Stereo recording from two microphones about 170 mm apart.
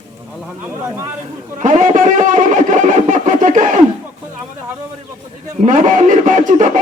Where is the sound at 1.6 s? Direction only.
50° right (ahead or behind).